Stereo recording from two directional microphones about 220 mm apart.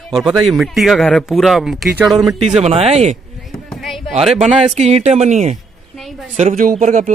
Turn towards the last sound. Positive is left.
turn(degrees=-35)  # may be behind; listen again after turning